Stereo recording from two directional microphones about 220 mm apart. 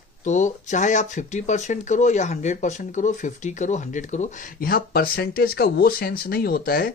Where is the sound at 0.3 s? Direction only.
35° left (ahead or behind).